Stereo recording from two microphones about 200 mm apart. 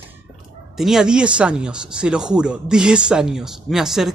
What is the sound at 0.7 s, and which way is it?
Speech, centre (ahead or behind).